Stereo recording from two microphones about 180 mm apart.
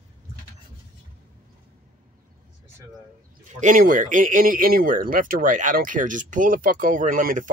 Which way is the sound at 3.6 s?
45° right (ahead or behind).